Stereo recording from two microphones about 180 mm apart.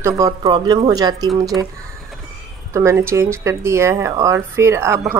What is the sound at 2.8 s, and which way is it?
Speech, 15° right (ahead or behind).